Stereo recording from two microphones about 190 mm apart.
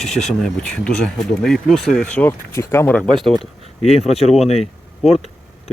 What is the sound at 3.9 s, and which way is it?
Speech, 35° left (ahead or behind).